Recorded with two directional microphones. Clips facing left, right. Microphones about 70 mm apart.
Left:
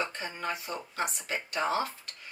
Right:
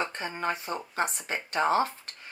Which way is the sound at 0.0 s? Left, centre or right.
Right.